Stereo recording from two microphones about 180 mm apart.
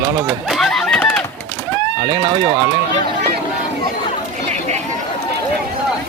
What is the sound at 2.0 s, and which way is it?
Speech, 20° right (ahead or behind).